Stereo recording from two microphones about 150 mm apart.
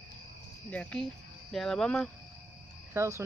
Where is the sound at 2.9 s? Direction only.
20° right (ahead or behind).